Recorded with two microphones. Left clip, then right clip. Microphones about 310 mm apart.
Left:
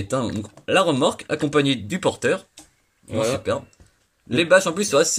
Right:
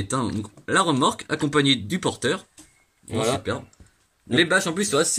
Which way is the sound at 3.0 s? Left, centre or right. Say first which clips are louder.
Left 2 dB; centre.